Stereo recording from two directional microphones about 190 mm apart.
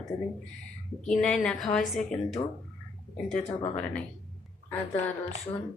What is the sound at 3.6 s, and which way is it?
Speech, 10° left (ahead or behind).